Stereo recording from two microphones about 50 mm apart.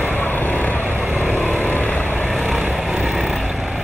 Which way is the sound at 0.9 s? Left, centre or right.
Right.